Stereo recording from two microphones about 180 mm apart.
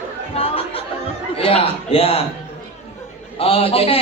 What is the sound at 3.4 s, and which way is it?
Speech, 30° left (ahead or behind).